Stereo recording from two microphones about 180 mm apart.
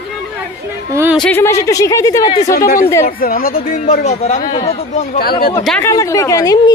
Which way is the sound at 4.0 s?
35° left (ahead or behind).